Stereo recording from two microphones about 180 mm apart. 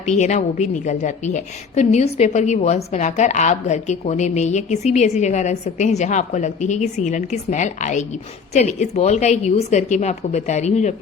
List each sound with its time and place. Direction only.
0.0 s a woman's voice: 40° left (ahead or behind)